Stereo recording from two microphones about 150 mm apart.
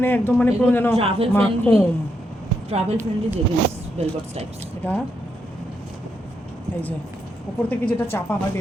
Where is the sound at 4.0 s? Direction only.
45° right (ahead or behind).